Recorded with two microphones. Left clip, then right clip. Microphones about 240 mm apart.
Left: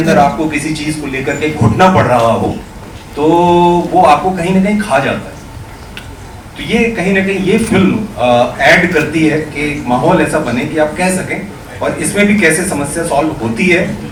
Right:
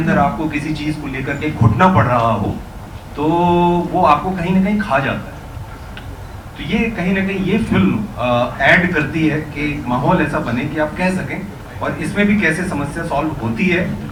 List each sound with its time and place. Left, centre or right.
0.2 s mantra: centre
0.5 s a man's voice: centre
1.6 s mantra: centre
2.0 s mantra: centre
6.6 s a man's voice: centre
10.1 s mantra: centre
10.4 s a man's voice: centre